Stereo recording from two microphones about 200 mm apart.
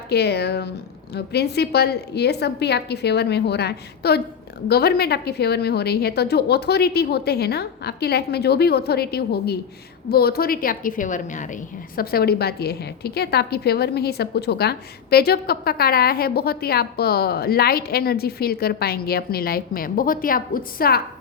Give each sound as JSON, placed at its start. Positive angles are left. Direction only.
{"t": 0.1, "sound": "a woman's voice", "side_deg": 55}